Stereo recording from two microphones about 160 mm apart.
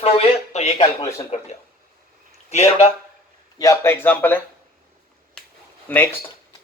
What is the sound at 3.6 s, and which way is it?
Speech, 20° left (ahead or behind).